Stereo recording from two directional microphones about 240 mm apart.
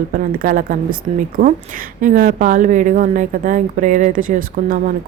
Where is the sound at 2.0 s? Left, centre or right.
Right.